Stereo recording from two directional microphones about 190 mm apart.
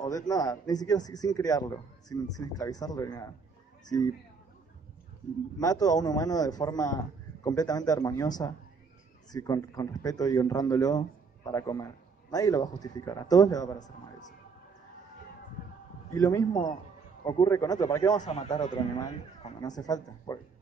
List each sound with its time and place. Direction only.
0.0 s speech: 20° left (ahead or behind)
5.6 s speech: 20° left (ahead or behind)
9.3 s speech: 20° left (ahead or behind)
16.2 s speech: 20° left (ahead or behind)